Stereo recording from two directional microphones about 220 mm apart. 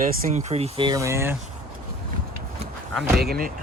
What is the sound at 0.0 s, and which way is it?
Speech, 35° right (ahead or behind).